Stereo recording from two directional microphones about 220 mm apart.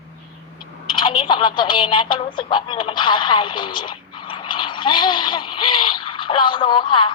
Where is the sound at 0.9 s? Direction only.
25° left (ahead or behind).